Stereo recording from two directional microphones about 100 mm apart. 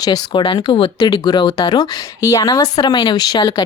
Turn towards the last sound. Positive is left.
turn(degrees=45)  # may be behind; listen again after turning